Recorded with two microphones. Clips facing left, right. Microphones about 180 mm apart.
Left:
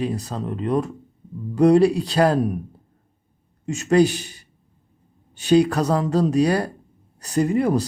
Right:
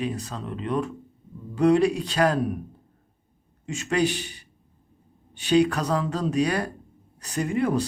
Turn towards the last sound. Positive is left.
turn(degrees=35)  # may be behind; listen again after turning